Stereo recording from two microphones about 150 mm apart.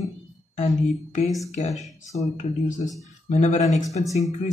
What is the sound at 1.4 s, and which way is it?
Speech, 50° left (ahead or behind).